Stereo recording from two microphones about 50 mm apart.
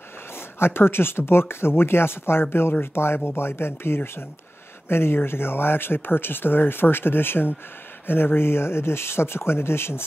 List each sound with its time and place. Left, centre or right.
0.6 s speech: left